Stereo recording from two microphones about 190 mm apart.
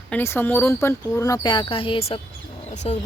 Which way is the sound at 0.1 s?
10° left (ahead or behind).